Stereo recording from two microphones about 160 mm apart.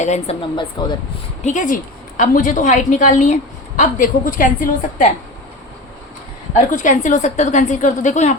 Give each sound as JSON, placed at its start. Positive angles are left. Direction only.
{"t": 0.0, "sound": "a woman's voice", "side_deg": 45}
{"t": 0.5, "sound": "speech", "side_deg": 30}
{"t": 1.5, "sound": "a woman's voice", "side_deg": 55}
{"t": 6.7, "sound": "a woman's voice", "side_deg": 50}